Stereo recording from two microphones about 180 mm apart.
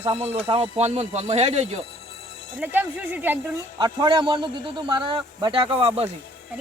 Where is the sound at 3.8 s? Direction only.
25° right (ahead or behind).